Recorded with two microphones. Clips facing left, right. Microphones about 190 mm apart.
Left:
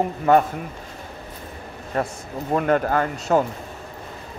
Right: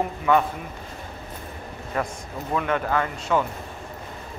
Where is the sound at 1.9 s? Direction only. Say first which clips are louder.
Left 3 dB; 35° left (ahead or behind).